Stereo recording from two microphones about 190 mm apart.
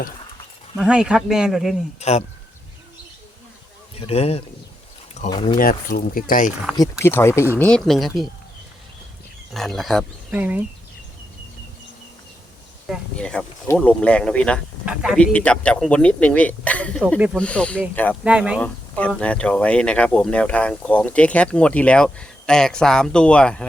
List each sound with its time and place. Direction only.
0.8 s speech: 5° right (ahead or behind)
2.0 s speech: 35° left (ahead or behind)
4.0 s speech: 30° left (ahead or behind)
5.5 s speech: 45° left (ahead or behind)
7.0 s speech: 15° left (ahead or behind)
9.5 s speech: centre (ahead or behind)
12.9 s speech: 5° left (ahead or behind)
18.2 s speech: 5° right (ahead or behind)
18.6 s speech: 5° left (ahead or behind)